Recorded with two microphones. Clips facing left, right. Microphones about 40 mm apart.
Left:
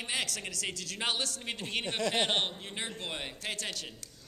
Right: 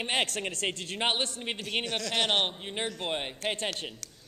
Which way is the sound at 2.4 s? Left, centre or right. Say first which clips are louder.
Right 4 dB; right.